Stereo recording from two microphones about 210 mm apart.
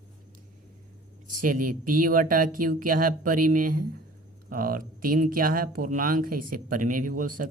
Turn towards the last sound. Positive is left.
turn(degrees=-40)  # may be behind; listen again after turning